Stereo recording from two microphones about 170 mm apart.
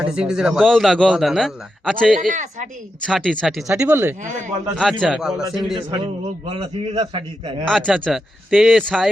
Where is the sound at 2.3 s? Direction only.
45° right (ahead or behind).